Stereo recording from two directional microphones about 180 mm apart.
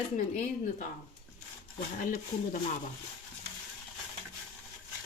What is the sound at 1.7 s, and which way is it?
Speech, 50° left (ahead or behind).